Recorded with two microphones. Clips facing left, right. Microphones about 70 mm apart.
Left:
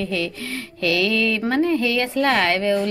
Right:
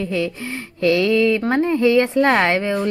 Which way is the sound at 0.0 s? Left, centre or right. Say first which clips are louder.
Right 3 dB; right.